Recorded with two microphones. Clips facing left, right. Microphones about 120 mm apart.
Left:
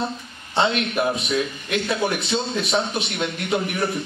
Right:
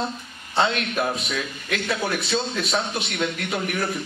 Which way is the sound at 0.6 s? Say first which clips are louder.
Left 2 dB; 20° left (ahead or behind).